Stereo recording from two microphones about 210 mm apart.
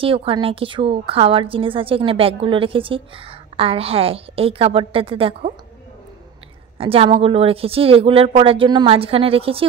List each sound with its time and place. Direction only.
0.0 s a woman's voice: 25° right (ahead or behind)
6.8 s a woman's voice: 25° right (ahead or behind)